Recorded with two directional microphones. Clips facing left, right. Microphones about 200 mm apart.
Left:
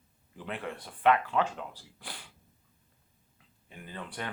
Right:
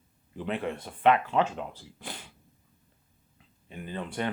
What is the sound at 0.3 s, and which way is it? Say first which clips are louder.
Speech: right 6 dB; 25° right (ahead or behind).